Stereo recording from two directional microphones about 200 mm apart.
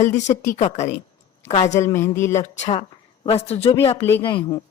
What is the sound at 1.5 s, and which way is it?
Speech, 35° left (ahead or behind).